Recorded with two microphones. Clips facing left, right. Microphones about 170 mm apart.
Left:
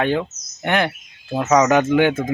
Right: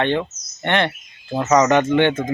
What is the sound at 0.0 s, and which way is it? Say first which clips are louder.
Speech: even; 5° left (ahead or behind).